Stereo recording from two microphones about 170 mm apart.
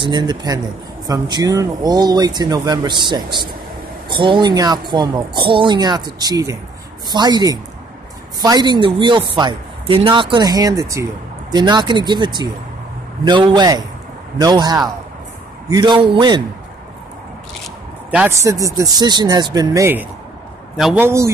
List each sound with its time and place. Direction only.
0.0 s speech: 25° right (ahead or behind)
18.1 s speech: 15° right (ahead or behind)
20.7 s a man's voice: centre (ahead or behind)
21.0 s speech: 15° right (ahead or behind)